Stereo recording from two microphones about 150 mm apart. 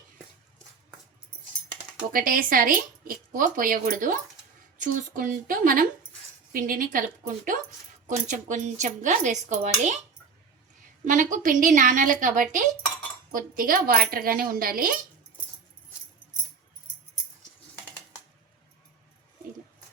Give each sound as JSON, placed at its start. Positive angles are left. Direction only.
{"t": 2.1, "sound": "a woman's voice", "side_deg": -70}
{"t": 11.0, "sound": "a woman's voice", "side_deg": -55}
{"t": 13.3, "sound": "speech", "side_deg": -70}